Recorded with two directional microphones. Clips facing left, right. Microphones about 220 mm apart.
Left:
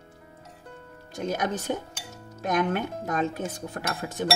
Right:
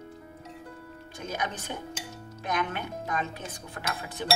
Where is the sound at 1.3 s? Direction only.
40° left (ahead or behind).